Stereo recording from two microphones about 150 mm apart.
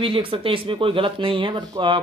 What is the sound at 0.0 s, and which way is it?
Speech, 35° right (ahead or behind).